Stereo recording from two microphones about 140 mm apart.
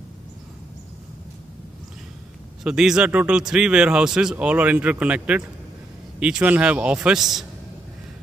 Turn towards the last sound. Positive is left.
turn(degrees=0)  # may be behind; listen again after turning